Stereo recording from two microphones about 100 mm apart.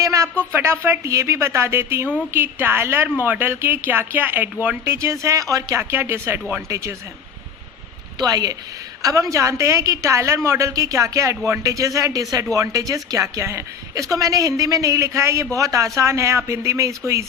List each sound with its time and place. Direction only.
0.0 s a sound: 35° right (ahead or behind)
0.5 s speech: 25° right (ahead or behind)
8.2 s a woman's voice: 40° right (ahead or behind)